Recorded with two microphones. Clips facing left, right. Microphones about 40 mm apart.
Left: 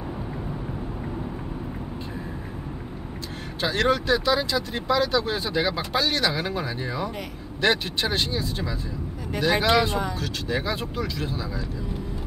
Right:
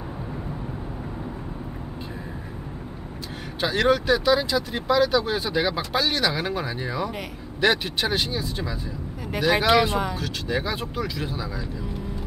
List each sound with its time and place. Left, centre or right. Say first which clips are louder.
3.6 s speech: right 2 dB; centre